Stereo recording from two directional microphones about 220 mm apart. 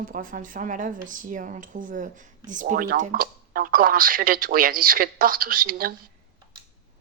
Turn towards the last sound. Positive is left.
turn(degrees=-40)  # may be behind; listen again after turning